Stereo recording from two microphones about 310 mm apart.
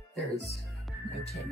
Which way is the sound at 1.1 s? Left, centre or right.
Centre.